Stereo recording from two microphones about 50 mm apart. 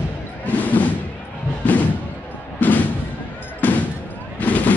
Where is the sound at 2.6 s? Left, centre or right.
Left.